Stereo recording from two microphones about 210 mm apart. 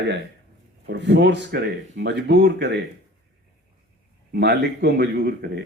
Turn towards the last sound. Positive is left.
turn(degrees=-50)  # may be behind; listen again after turning